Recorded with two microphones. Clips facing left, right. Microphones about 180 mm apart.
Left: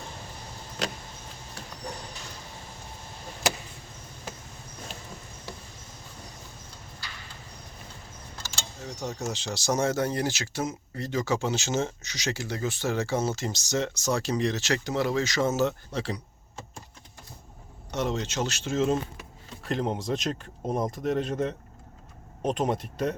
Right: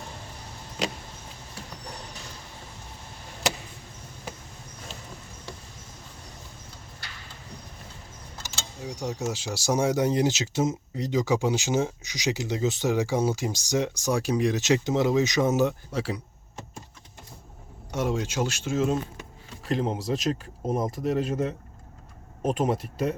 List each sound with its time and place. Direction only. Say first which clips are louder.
8.5 s speech: right 3 dB; 10° right (ahead or behind)
17.9 s speech: right 2 dB; 10° right (ahead or behind)